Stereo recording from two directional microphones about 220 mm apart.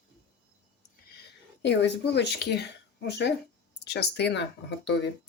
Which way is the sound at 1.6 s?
50° left (ahead or behind).